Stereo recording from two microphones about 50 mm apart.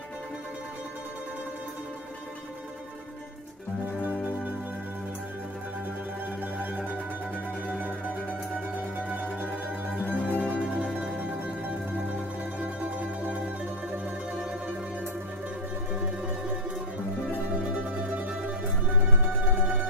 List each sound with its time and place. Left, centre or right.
6.6 s music: right
8.9 s music: right
10.1 s music: left
11.1 s music: right
17.6 s music: right